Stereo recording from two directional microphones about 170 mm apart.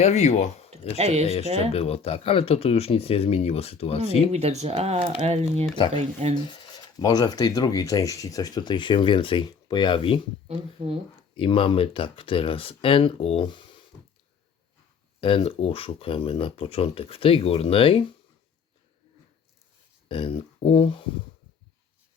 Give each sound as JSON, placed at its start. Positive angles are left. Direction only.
{"t": 0.0, "sound": "speech", "side_deg": 40}
{"t": 0.9, "sound": "speech", "side_deg": -40}
{"t": 1.7, "sound": "speech", "side_deg": 35}
{"t": 4.3, "sound": "speech", "side_deg": -40}
{"t": 6.3, "sound": "speech", "side_deg": 25}
{"t": 10.5, "sound": "speech", "side_deg": -35}
{"t": 11.3, "sound": "speech", "side_deg": 30}
{"t": 15.2, "sound": "speech", "side_deg": 35}
{"t": 20.1, "sound": "a sound", "side_deg": 30}